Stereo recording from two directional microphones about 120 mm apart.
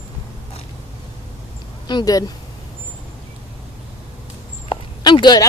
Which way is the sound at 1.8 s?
35° left (ahead or behind).